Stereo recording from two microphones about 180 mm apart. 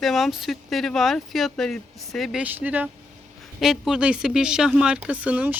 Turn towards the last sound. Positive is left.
turn(degrees=-10)  # may be behind; listen again after turning